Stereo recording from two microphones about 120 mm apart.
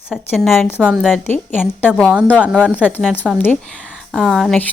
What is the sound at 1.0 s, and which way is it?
Speech, 15° left (ahead or behind).